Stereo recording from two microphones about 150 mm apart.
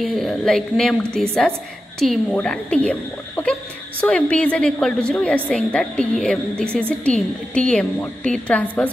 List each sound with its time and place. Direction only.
0.0 s a woman's voice: centre (ahead or behind)